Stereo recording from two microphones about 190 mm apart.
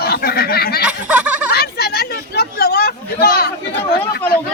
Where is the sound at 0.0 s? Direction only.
55° left (ahead or behind).